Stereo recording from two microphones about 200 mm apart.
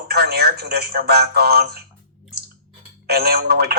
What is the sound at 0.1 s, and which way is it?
Speech, 55° right (ahead or behind).